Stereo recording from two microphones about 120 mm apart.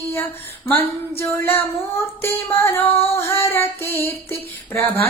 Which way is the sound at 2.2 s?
20° left (ahead or behind).